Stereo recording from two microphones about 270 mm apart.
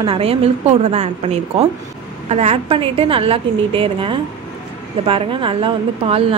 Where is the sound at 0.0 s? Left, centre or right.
Right.